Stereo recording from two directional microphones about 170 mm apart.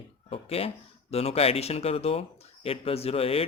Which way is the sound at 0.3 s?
35° left (ahead or behind).